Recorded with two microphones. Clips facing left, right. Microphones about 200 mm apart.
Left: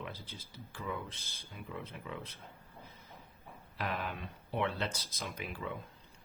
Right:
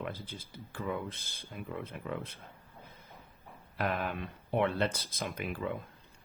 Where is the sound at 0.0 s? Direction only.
50° right (ahead or behind).